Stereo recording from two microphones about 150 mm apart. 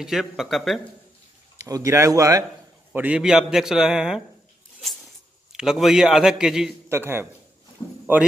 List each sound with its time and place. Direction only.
0.0 s a man's voice: 5° right (ahead or behind)
1.6 s speech: 20° right (ahead or behind)
2.9 s a man's voice: 10° right (ahead or behind)
5.5 s a man's voice: 5° right (ahead or behind)
6.9 s a man's voice: 15° right (ahead or behind)